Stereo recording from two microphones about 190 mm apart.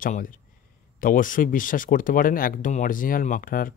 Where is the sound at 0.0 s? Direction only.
45° left (ahead or behind).